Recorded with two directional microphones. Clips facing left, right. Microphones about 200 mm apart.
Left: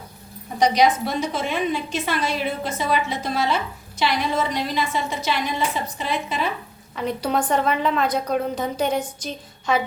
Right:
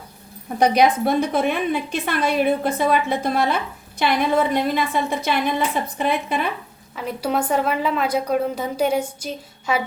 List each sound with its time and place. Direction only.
0.6 s a woman's voice: 55° right (ahead or behind)
6.9 s a woman's voice: 5° right (ahead or behind)